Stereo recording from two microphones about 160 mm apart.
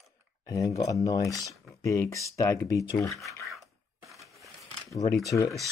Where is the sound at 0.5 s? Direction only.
20° left (ahead or behind).